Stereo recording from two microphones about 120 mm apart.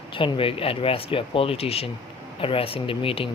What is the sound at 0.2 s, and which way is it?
Speech, 50° left (ahead or behind).